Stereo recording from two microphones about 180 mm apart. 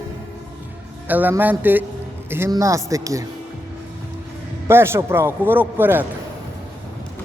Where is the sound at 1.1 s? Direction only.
10° right (ahead or behind).